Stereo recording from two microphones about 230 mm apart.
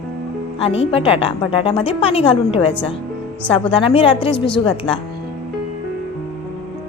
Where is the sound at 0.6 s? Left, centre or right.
Left.